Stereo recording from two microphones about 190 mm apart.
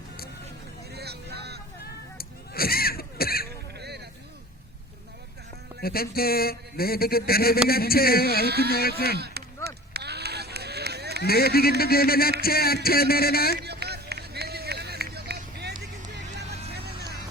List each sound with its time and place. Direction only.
0.9 s vehicle: 60° right (ahead or behind)
1.8 s a sound: 55° left (ahead or behind)
3.8 s a sound: 60° right (ahead or behind)
5.8 s speech: 55° left (ahead or behind)
8.4 s speech: 55° right (ahead or behind)
8.7 s speech: 55° left (ahead or behind)
9.1 s speech: 60° right (ahead or behind)
9.6 s a sound: 60° right (ahead or behind)
11.2 s speech: 55° left (ahead or behind)
13.7 s run: 60° right (ahead or behind)
16.7 s vehicle: 60° right (ahead or behind)